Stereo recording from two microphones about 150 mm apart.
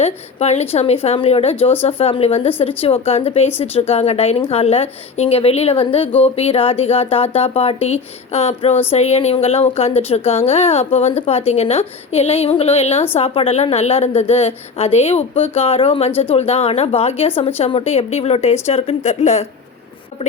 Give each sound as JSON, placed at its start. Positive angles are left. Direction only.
{"t": 0.0, "sound": "a woman's voice", "side_deg": 45}